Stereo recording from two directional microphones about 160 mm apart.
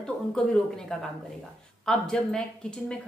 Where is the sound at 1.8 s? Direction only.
5° left (ahead or behind).